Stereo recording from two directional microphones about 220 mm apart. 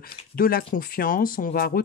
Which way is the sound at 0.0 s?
40° left (ahead or behind).